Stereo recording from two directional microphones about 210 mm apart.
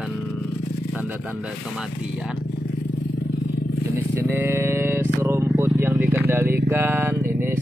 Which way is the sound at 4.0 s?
10° right (ahead or behind).